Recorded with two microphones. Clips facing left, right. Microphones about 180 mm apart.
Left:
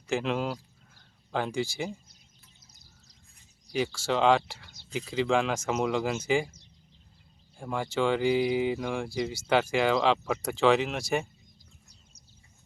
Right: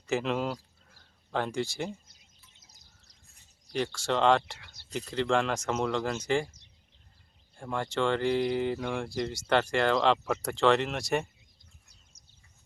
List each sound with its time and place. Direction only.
0.1 s speech: centre (ahead or behind)
3.7 s speech: centre (ahead or behind)
7.5 s speech: 5° left (ahead or behind)